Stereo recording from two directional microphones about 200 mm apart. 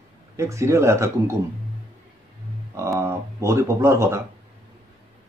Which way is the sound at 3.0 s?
15° right (ahead or behind).